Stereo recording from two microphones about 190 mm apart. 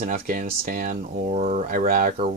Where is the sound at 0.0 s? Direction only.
45° right (ahead or behind).